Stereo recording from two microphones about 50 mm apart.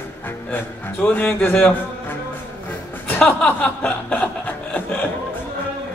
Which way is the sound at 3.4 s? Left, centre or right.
Left.